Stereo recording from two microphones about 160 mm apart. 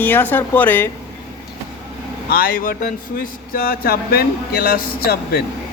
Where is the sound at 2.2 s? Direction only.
65° left (ahead or behind).